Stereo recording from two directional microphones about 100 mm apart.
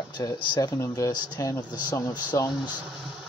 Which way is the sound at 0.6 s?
35° left (ahead or behind).